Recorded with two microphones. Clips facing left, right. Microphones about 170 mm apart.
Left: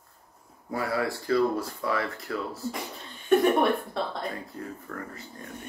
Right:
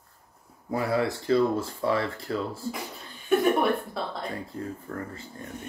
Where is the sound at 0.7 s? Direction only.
20° right (ahead or behind).